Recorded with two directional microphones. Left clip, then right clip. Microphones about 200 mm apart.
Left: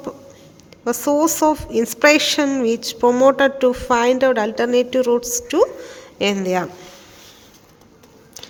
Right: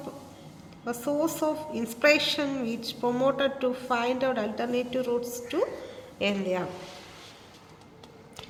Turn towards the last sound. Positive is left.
turn(degrees=35)  # may be behind; listen again after turning